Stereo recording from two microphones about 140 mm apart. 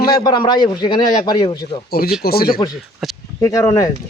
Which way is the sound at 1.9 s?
90° left.